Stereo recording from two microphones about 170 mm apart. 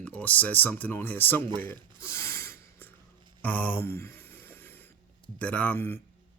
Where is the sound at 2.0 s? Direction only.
15° left (ahead or behind).